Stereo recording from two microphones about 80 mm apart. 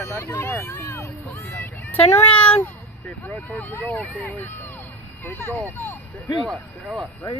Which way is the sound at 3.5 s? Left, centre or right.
Left.